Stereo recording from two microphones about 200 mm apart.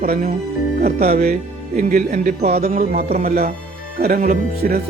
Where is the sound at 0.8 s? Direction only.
50° right (ahead or behind).